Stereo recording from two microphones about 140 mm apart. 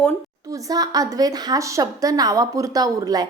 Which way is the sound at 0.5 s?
25° right (ahead or behind).